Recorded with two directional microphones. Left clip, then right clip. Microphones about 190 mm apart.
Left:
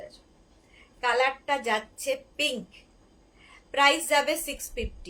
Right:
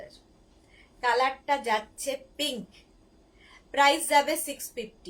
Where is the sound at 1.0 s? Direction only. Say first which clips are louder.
Even; 20° left (ahead or behind).